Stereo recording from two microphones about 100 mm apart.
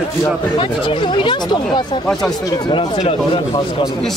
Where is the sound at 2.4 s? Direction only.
40° left (ahead or behind).